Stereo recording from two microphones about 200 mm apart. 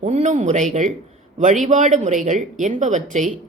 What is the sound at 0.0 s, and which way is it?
A woman's voice, 35° right (ahead or behind).